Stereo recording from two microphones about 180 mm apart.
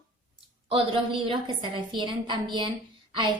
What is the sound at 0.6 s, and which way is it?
A woman's voice, 30° right (ahead or behind).